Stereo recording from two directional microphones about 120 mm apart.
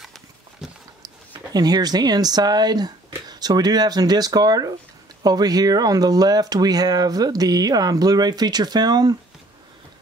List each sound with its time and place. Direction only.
1.5 s speech: 35° right (ahead or behind)